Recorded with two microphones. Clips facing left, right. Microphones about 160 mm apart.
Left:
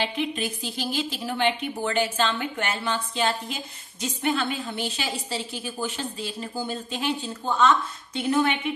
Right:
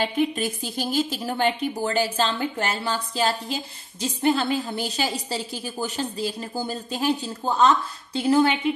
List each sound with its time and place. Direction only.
0.0 s a woman's voice: 45° right (ahead or behind)